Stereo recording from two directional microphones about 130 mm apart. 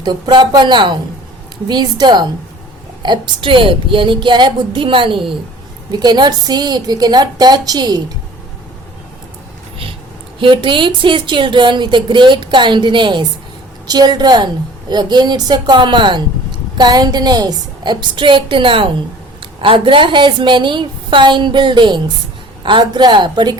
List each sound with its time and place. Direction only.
0.0 s speech: 35° right (ahead or behind)
10.4 s speech: 40° right (ahead or behind)